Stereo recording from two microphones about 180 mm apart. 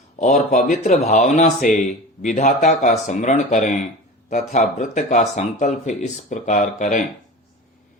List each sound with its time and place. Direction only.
0.2 s speech: 45° left (ahead or behind)